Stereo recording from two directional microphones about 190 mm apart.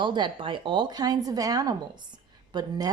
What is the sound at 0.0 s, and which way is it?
Speech, 25° right (ahead or behind).